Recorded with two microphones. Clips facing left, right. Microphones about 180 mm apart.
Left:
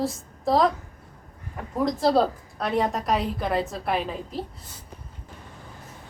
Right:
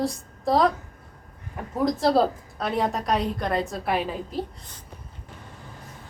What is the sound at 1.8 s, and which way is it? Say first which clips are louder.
A woman's voice: even; centre (ahead or behind).